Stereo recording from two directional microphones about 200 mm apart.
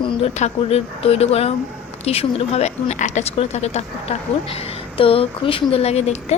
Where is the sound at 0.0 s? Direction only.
30° left (ahead or behind).